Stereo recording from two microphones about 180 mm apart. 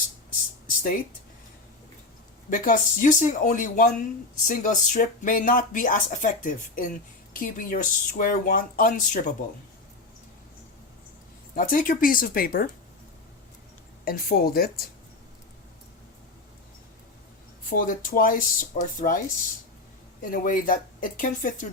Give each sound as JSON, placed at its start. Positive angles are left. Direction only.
{"t": 2.5, "sound": "speech", "side_deg": 50}
{"t": 11.5, "sound": "speech", "side_deg": 50}
{"t": 14.0, "sound": "speech", "side_deg": 55}
{"t": 17.7, "sound": "speech", "side_deg": 50}